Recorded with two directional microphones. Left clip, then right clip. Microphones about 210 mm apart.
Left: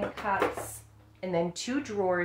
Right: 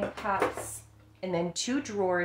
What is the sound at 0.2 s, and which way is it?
Speech, 15° right (ahead or behind).